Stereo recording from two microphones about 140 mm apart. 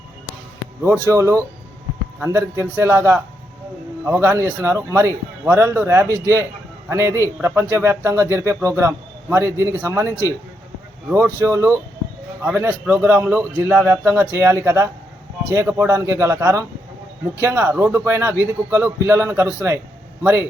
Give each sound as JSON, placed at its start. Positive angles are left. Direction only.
{"t": 1.1, "sound": "a man's voice", "side_deg": -20}